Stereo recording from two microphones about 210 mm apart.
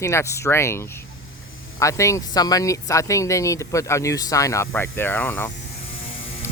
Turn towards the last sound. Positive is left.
turn(degrees=10)  # may be behind; listen again after turning